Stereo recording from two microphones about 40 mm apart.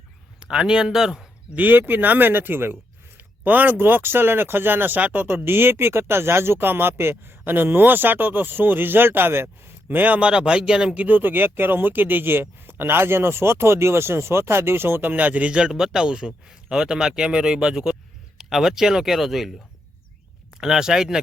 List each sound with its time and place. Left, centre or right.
0.3 s speech: centre
1.5 s speech: right
3.2 s speech: right
4.9 s speech: right
5.3 s speech: right
9.9 s speech: right
10.2 s speech: right
10.9 s speech: right
15.1 s speech: right
15.4 s speech: right
18.3 s speech: centre
20.6 s speech: centre